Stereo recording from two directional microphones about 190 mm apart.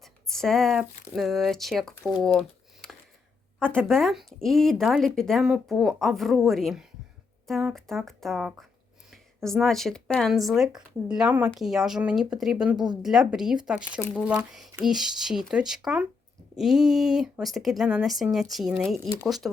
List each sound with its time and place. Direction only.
0.0 s speech: centre (ahead or behind)
12.7 s a woman's voice: 25° right (ahead or behind)
13.0 s speech: centre (ahead or behind)